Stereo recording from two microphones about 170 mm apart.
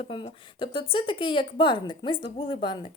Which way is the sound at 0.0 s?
30° left (ahead or behind).